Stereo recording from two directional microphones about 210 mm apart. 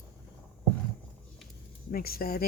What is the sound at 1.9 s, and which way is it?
Speech, 45° left (ahead or behind).